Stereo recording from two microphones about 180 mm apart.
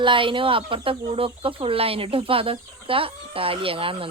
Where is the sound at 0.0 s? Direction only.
30° right (ahead or behind).